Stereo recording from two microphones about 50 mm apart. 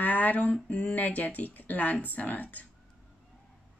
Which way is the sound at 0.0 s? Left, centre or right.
Left.